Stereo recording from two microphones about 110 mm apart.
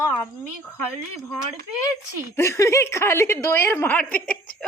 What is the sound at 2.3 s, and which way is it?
A woman's voice, 25° left (ahead or behind).